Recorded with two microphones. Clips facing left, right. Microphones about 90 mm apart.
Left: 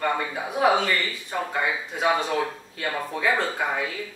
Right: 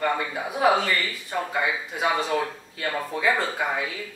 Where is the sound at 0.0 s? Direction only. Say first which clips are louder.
Even; centre (ahead or behind).